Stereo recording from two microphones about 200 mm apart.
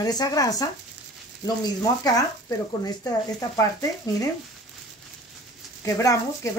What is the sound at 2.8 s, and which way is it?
Speech, 15° left (ahead or behind).